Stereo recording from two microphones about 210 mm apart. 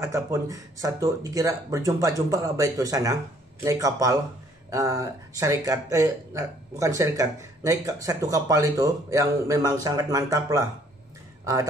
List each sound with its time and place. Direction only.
0.0 s speech: 15° right (ahead or behind)